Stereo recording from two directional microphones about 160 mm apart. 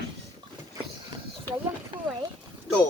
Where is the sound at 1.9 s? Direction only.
35° right (ahead or behind).